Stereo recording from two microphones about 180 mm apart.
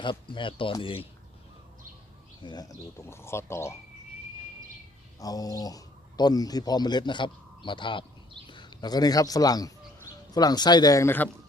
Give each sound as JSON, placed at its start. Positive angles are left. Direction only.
{"t": 0.0, "sound": "speech", "side_deg": 25}
{"t": 2.4, "sound": "speech", "side_deg": 25}
{"t": 5.2, "sound": "speech", "side_deg": 20}